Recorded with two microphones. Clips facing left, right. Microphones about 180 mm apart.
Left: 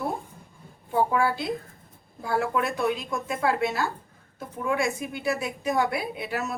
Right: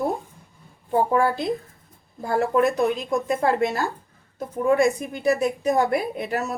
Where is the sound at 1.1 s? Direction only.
45° right (ahead or behind).